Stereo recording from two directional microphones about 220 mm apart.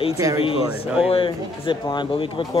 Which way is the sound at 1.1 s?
25° left (ahead or behind).